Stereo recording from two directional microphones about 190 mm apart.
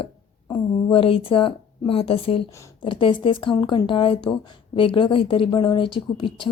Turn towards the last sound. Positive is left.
turn(degrees=25)  # may be behind; listen again after turning